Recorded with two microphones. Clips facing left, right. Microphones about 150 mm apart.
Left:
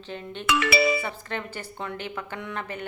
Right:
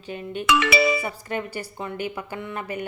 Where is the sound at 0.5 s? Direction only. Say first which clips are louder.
Right 2 dB; 90° right.